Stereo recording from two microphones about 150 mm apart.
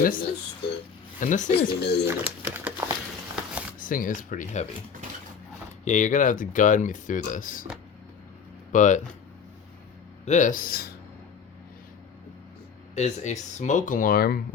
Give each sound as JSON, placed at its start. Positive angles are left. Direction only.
{"t": 0.0, "sound": "speech", "side_deg": 70}
{"t": 1.2, "sound": "speech", "side_deg": 55}
{"t": 2.0, "sound": "speech", "side_deg": -10}
{"t": 3.8, "sound": "speech", "side_deg": 65}
{"t": 5.8, "sound": "speech", "side_deg": 55}
{"t": 8.7, "sound": "speech", "side_deg": 55}
{"t": 10.2, "sound": "speech", "side_deg": 55}
{"t": 12.9, "sound": "speech", "side_deg": 50}